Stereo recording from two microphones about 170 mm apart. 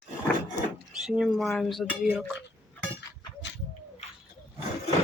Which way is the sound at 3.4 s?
90° left.